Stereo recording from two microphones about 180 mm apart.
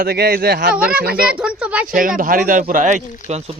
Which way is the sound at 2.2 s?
50° right (ahead or behind).